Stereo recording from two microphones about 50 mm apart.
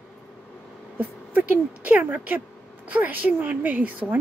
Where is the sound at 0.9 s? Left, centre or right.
Right.